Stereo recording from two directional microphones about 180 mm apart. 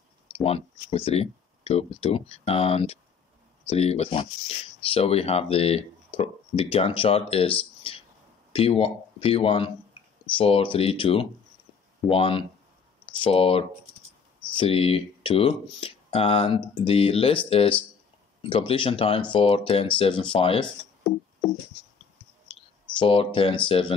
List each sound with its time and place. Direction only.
0.3 s speech: 35° left (ahead or behind)
22.9 s speech: 30° left (ahead or behind)